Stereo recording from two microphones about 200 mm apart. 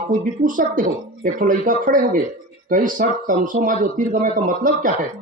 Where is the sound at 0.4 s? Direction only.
40° right (ahead or behind).